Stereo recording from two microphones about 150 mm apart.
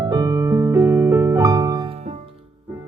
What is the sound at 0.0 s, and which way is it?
Music, 25° right (ahead or behind).